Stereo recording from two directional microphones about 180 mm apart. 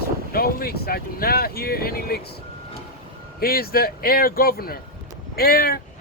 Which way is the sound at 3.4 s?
55° left (ahead or behind).